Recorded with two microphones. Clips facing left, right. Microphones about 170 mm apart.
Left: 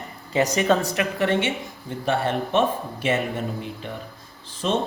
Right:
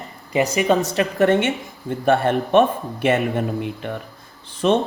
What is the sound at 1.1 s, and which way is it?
Speech, 50° right (ahead or behind).